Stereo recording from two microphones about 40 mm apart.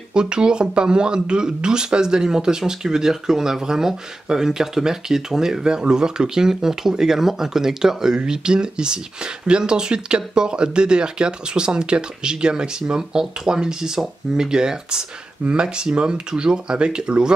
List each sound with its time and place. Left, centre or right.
0.1 s speech: right